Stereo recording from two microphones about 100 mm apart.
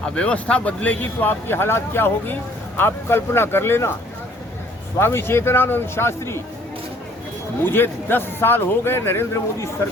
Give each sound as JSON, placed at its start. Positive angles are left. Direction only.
{"t": 0.0, "sound": "speech", "side_deg": 10}
{"t": 4.9, "sound": "speech", "side_deg": 25}
{"t": 7.6, "sound": "speech", "side_deg": 20}